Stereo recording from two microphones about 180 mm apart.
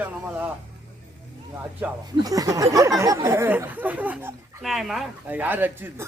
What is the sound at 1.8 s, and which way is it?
Speech, 10° right (ahead or behind).